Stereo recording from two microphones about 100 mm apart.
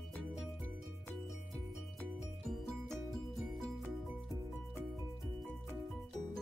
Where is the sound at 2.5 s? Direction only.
Centre (ahead or behind).